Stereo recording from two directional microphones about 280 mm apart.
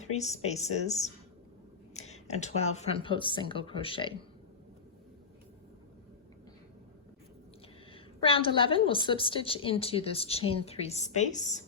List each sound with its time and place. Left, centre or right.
0.0 s a woman's voice: left
1.9 s a sound: left
2.7 s a woman's voice: left
7.9 s a woman's voice: centre